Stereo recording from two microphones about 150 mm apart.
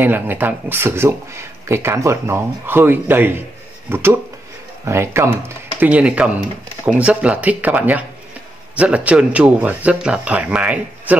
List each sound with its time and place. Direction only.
0.0 s speech: 15° right (ahead or behind)